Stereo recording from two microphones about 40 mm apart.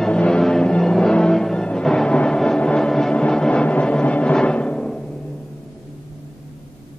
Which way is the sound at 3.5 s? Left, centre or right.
Left.